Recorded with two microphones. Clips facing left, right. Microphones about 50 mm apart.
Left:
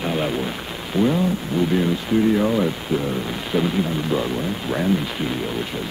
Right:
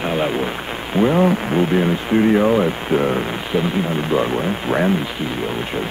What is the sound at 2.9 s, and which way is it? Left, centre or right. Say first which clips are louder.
Speech: right 8 dB; right.